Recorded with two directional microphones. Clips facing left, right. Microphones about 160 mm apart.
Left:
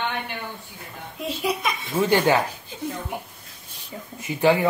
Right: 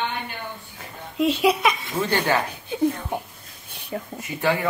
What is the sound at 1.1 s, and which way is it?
Speech, 80° right.